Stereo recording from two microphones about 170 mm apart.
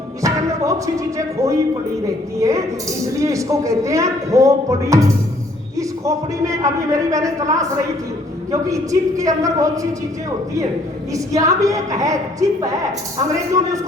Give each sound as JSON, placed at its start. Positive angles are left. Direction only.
{"t": 0.2, "sound": "a man's voice", "side_deg": -20}
{"t": 2.4, "sound": "a man's voice", "side_deg": -20}
{"t": 11.1, "sound": "a man's voice", "side_deg": -20}